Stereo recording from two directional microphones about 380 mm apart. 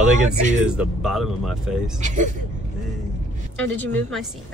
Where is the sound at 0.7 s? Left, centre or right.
Centre.